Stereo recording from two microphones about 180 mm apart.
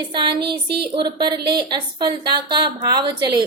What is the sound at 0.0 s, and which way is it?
A woman's voice, 25° right (ahead or behind).